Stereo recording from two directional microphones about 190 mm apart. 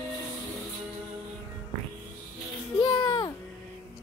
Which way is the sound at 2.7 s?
20° left (ahead or behind).